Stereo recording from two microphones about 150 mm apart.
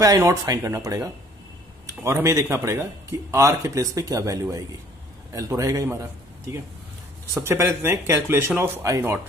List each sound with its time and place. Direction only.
0.0 s a man's voice: 25° right (ahead or behind)